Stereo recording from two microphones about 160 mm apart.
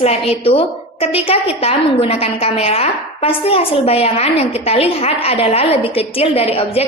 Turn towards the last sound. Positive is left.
turn(degrees=40)  # may be behind; listen again after turning